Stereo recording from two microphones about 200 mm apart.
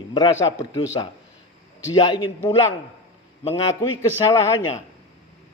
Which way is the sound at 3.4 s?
25° left (ahead or behind).